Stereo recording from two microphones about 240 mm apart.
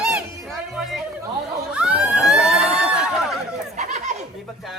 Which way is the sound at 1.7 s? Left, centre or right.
Centre.